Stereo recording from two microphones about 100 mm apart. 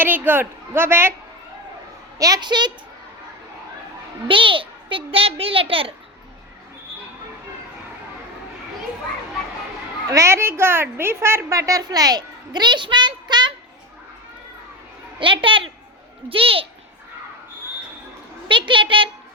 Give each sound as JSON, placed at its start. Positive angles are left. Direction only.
{"t": 0.0, "sound": "a woman's voice", "side_deg": -20}
{"t": 2.1, "sound": "a woman's voice", "side_deg": -40}
{"t": 4.3, "sound": "a child's voice", "side_deg": -60}
{"t": 10.1, "sound": "a woman's voice", "side_deg": -30}
{"t": 15.2, "sound": "a woman's voice", "side_deg": -60}
{"t": 18.7, "sound": "a woman's voice", "side_deg": -60}